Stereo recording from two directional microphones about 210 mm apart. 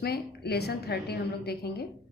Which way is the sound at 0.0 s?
50° left (ahead or behind).